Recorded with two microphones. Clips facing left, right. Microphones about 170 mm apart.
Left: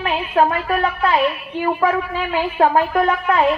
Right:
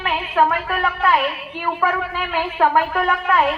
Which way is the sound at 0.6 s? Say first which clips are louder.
Left 2 dB; 30° left (ahead or behind).